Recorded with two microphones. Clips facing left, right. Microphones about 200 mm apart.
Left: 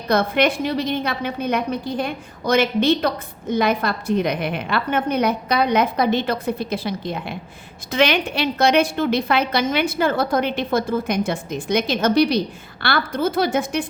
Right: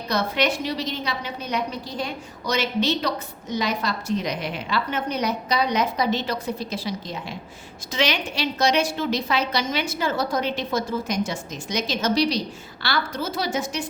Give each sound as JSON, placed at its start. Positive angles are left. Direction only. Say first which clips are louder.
{"t": 0.1, "sound": "a woman's voice", "louder": "left 5 dB", "side_deg": 55}